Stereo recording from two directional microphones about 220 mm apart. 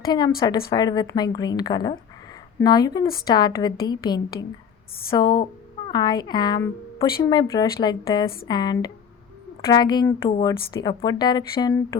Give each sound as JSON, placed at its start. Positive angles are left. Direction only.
{"t": 0.0, "sound": "a woman's voice", "side_deg": 20}